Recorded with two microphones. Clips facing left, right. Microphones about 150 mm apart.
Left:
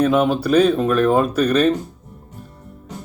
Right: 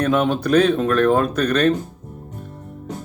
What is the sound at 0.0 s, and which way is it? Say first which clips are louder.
Speech: left 2 dB; 5° left (ahead or behind).